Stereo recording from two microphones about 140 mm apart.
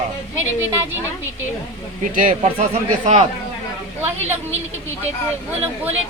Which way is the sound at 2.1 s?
75° right (ahead or behind).